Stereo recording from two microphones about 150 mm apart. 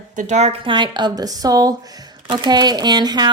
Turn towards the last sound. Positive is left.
turn(degrees=-30)  # may be behind; listen again after turning